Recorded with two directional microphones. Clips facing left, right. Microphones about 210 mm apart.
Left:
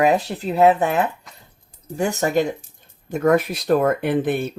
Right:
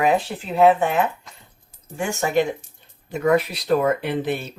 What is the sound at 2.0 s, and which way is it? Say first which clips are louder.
Speech: left 1 dB; 40° left (ahead or behind).